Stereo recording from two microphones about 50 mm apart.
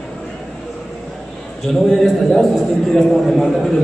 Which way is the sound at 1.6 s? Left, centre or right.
Centre.